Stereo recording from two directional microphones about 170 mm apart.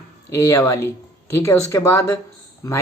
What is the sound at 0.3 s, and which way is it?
Speech, 20° left (ahead or behind).